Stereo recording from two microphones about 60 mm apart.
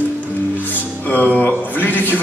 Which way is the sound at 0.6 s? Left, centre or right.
Left.